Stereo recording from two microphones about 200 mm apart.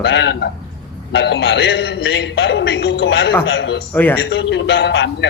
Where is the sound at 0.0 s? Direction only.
60° left (ahead or behind).